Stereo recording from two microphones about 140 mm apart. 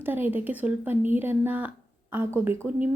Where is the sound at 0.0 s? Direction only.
15° right (ahead or behind).